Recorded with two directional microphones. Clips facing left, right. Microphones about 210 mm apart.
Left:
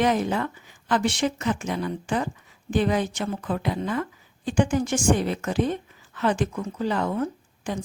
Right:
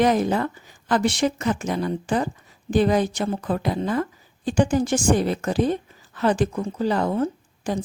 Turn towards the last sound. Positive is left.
turn(degrees=-35)  # may be behind; listen again after turning